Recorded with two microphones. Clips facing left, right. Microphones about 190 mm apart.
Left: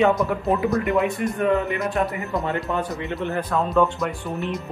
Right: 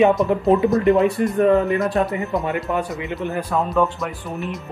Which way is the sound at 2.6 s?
Centre (ahead or behind).